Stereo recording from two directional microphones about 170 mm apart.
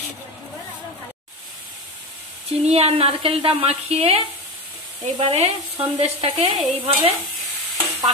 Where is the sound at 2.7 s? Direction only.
40° right (ahead or behind).